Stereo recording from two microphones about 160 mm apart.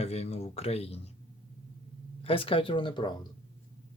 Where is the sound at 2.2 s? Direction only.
35° left (ahead or behind).